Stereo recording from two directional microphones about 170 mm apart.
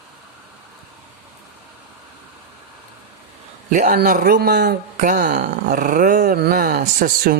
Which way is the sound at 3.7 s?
55° right (ahead or behind).